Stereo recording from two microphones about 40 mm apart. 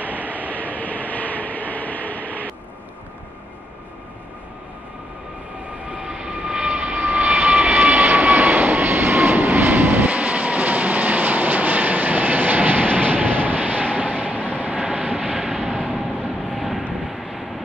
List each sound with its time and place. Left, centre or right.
0.0 s vehicle: right
0.7 s train: left
6.0 s vehicle: centre
6.7 s vehicle: right
10.0 s train: right
13.9 s vehicle: right
14.8 s vehicle: right
15.6 s a sound: left
17.0 s vehicle: centre